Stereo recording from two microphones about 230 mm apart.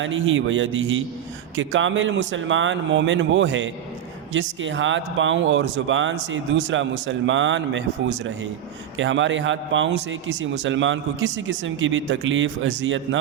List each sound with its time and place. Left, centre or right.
0.0 s a man's voice: right